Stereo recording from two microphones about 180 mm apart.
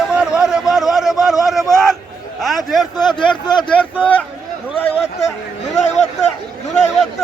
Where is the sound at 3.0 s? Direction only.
25° left (ahead or behind).